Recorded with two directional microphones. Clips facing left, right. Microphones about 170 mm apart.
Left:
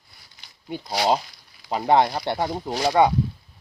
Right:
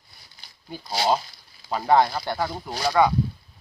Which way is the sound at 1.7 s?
20° left (ahead or behind).